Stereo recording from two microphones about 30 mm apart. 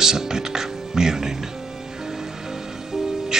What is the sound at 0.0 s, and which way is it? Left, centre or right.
Music, centre.